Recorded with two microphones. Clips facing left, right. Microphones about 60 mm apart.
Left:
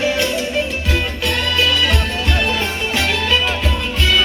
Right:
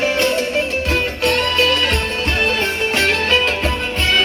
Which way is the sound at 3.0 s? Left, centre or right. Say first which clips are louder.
Right 1 dB; right.